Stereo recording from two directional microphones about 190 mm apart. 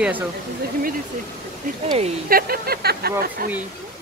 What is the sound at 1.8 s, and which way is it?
Speech, 35° right (ahead or behind).